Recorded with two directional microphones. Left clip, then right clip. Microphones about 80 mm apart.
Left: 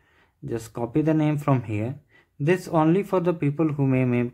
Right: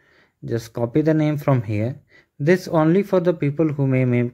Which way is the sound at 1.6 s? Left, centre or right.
Right.